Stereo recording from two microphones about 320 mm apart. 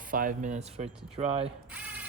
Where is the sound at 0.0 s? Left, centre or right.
Right.